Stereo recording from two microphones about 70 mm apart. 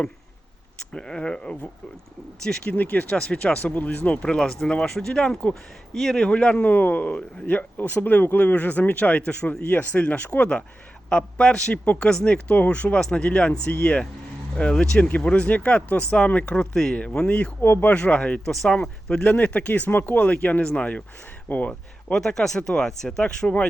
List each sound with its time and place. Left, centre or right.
0.8 s speech: centre
2.6 s speech: left
17.6 s speech: left
17.9 s speech: centre